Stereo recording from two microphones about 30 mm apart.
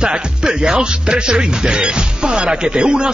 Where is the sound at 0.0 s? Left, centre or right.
Right.